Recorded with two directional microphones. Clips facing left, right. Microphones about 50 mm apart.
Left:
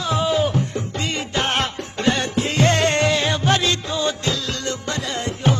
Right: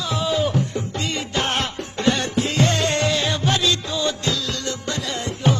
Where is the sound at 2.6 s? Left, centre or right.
Left.